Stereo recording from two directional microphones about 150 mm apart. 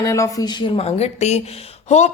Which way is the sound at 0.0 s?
20° left (ahead or behind).